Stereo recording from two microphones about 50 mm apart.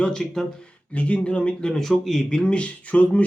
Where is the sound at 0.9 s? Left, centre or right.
Left.